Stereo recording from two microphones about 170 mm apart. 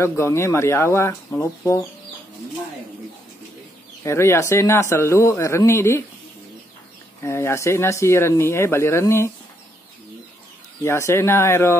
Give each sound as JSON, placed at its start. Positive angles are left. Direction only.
{"t": 0.0, "sound": "speech", "side_deg": 15}
{"t": 4.0, "sound": "speech", "side_deg": 15}
{"t": 7.2, "sound": "speech", "side_deg": 15}
{"t": 10.8, "sound": "speech", "side_deg": 15}